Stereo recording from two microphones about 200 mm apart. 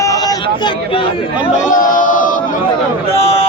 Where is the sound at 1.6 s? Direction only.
40° left (ahead or behind).